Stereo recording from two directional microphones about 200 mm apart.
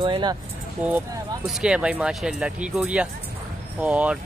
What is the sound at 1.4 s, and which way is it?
Speech, 5° right (ahead or behind).